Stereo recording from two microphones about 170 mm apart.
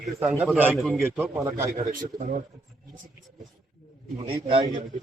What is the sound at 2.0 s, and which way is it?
Speech, 50° right (ahead or behind).